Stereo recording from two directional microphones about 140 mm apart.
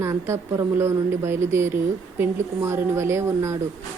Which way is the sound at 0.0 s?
20° right (ahead or behind).